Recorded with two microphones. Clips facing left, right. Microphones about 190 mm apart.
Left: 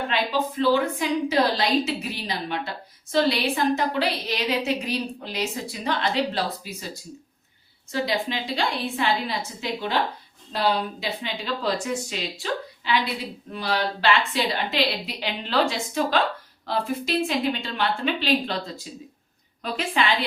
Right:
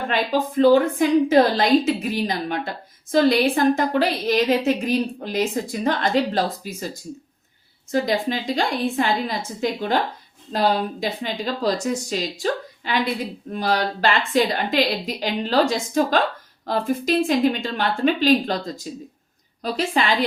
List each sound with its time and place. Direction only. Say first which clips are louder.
0.1 s a woman's voice: right 3 dB; 45° right (ahead or behind)
7.9 s a woman's voice: right 5 dB; 45° right (ahead or behind)